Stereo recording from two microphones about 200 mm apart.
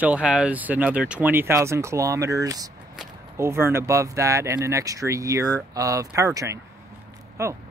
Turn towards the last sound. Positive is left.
turn(degrees=-15)  # may be behind; listen again after turning